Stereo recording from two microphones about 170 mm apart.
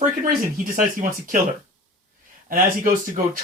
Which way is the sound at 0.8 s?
50° right (ahead or behind).